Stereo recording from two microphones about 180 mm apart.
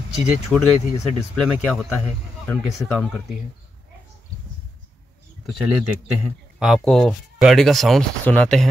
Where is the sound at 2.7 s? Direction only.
Centre (ahead or behind).